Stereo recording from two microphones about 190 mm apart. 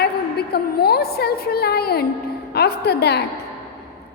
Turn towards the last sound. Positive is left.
turn(degrees=60)  # may be behind; listen again after turning